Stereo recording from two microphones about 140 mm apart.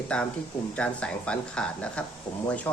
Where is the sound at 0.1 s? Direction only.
10° left (ahead or behind).